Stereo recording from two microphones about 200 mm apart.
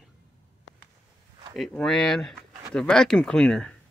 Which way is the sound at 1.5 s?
Centre (ahead or behind).